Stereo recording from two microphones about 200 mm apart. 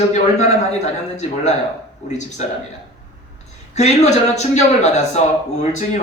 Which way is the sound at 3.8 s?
35° left (ahead or behind).